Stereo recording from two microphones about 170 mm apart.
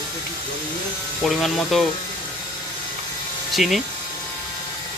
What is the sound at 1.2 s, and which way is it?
Speech, centre (ahead or behind).